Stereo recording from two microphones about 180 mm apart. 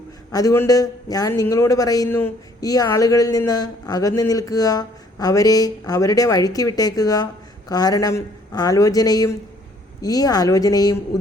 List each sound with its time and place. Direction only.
0.3 s a man's voice: 20° left (ahead or behind)